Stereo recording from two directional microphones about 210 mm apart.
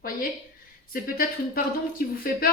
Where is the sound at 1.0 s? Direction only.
45° left (ahead or behind).